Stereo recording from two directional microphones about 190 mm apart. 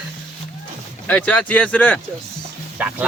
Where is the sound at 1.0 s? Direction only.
5° left (ahead or behind).